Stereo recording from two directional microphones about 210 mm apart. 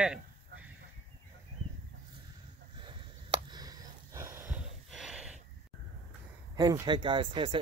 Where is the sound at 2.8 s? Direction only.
25° right (ahead or behind); by 5.4 s 5° right (ahead or behind).